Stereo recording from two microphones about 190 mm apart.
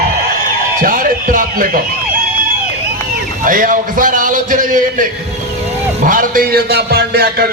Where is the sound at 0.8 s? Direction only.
45° right (ahead or behind).